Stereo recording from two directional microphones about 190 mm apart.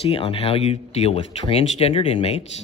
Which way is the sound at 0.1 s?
30° left (ahead or behind).